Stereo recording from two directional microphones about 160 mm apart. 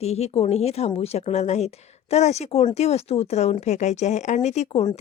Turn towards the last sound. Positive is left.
turn(degrees=45)  # may be behind; listen again after turning